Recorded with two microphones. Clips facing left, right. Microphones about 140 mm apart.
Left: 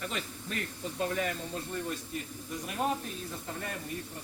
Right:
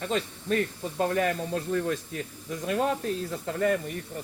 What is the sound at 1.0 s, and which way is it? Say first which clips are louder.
Speech: right 7 dB; 55° right (ahead or behind).